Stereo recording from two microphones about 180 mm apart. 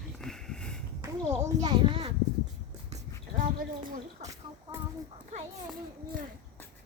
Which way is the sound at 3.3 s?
50° right (ahead or behind).